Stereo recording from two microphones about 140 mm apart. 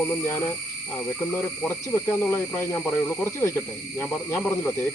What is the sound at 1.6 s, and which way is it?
Speech, 15° left (ahead or behind).